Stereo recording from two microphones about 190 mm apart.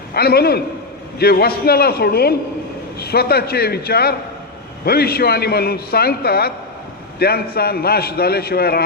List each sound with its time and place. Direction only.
0.1 s a man's voice: 55° left (ahead or behind)